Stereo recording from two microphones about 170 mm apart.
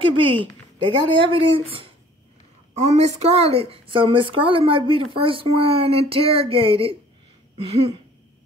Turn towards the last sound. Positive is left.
turn(degrees=-35)  # may be behind; listen again after turning